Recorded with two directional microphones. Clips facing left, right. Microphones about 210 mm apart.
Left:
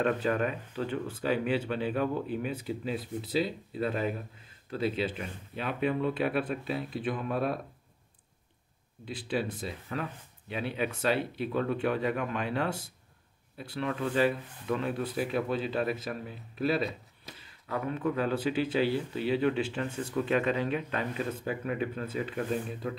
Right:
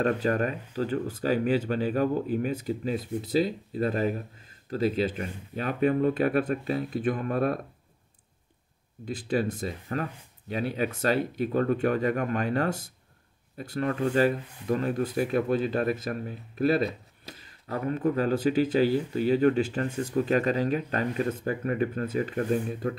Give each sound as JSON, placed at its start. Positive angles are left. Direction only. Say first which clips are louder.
{"t": 0.0, "sound": "speech", "louder": "right 3 dB", "side_deg": -40}
{"t": 9.0, "sound": "speech", "louder": "right 5 dB", "side_deg": -45}